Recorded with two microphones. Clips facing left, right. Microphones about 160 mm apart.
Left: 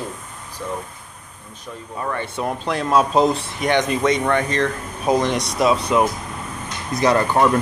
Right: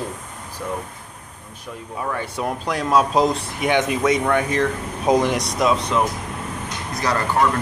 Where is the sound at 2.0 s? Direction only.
5° right (ahead or behind).